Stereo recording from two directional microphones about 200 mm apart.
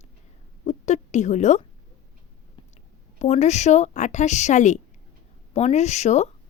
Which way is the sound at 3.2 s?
35° left (ahead or behind).